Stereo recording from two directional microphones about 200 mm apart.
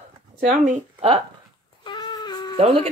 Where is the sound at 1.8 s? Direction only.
20° left (ahead or behind).